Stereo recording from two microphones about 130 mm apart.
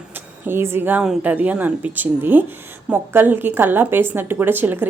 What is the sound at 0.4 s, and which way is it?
A woman's voice, 20° right (ahead or behind).